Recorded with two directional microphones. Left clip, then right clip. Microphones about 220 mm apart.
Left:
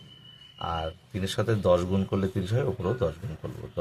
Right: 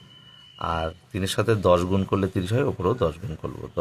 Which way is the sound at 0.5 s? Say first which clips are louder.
Right 4 dB; 40° right (ahead or behind).